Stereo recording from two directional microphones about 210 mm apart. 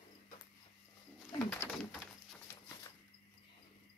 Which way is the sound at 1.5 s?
10° left (ahead or behind).